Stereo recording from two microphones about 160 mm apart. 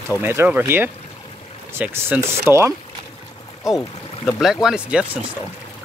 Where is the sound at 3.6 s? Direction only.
Centre (ahead or behind).